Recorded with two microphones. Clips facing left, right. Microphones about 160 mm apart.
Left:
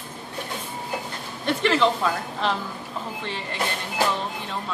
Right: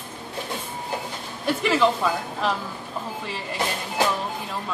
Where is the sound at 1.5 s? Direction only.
5° right (ahead or behind).